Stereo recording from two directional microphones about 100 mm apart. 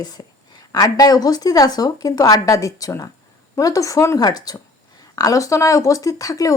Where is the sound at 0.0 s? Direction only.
40° left (ahead or behind).